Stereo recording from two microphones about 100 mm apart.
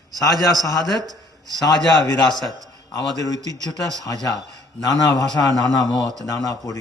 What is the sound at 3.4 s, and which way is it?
Speech, 35° right (ahead or behind).